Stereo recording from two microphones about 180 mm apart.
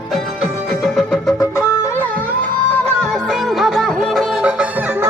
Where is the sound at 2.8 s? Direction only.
5° left (ahead or behind).